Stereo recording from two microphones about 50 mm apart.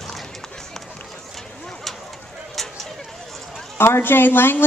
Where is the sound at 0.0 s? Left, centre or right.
Centre.